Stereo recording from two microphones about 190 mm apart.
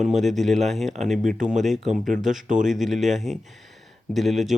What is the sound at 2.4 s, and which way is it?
Speech, 40° right (ahead or behind).